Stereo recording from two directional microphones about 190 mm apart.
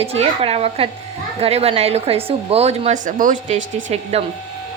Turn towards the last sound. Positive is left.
turn(degrees=-35)  # may be behind; listen again after turning